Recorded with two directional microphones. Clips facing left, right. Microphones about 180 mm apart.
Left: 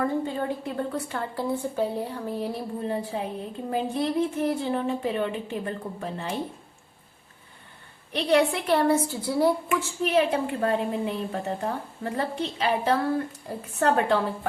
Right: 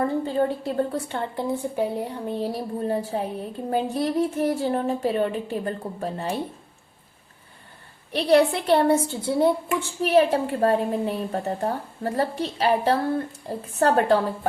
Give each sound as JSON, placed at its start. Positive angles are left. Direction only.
{"t": 0.0, "sound": "a woman's voice", "side_deg": -35}
{"t": 2.8, "sound": "a woman's voice", "side_deg": -40}
{"t": 8.1, "sound": "a woman's voice", "side_deg": -35}
{"t": 10.0, "sound": "a woman's voice", "side_deg": -35}